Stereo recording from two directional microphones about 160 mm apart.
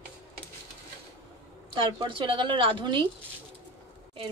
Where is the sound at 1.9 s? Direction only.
30° right (ahead or behind).